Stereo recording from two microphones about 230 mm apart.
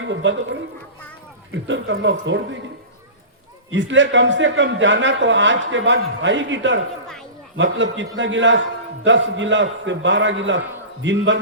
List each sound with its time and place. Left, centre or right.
0.0 s a man's voice: right
1.6 s a man's voice: right
3.7 s a man's voice: right